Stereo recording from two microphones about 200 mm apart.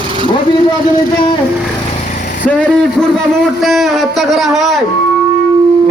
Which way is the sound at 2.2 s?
40° left (ahead or behind).